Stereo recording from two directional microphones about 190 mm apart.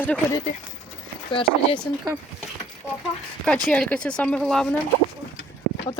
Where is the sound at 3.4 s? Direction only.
5° left (ahead or behind).